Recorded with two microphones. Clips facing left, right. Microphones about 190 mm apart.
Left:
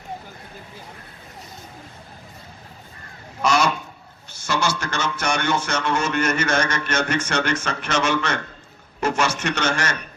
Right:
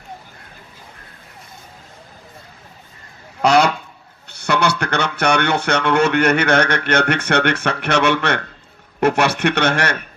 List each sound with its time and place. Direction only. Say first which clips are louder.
3.4 s goose: right 6 dB; 60° right (ahead or behind)
4.3 s speech: right 5 dB; 65° right (ahead or behind)